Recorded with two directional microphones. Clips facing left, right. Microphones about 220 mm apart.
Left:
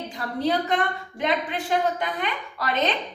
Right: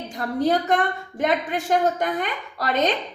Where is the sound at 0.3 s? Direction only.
45° right (ahead or behind).